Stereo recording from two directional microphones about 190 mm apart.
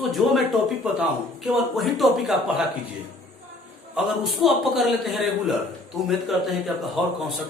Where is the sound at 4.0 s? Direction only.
Centre (ahead or behind).